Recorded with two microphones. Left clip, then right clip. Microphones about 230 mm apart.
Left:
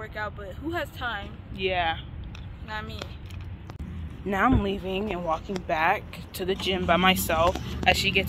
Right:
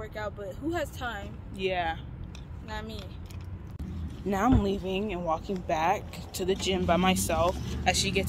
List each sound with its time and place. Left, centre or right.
0.0 s speech: centre
1.5 s speech: centre
2.7 s speech: centre
4.5 s speech: centre
4.8 s speech: centre